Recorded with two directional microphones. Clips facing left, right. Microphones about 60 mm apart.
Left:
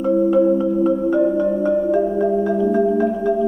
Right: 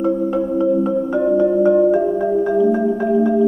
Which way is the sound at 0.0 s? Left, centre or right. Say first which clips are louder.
Left 3 dB; centre.